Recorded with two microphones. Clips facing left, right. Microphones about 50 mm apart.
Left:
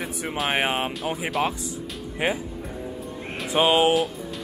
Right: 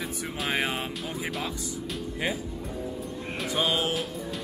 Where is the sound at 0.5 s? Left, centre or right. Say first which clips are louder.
Left 4 dB; left.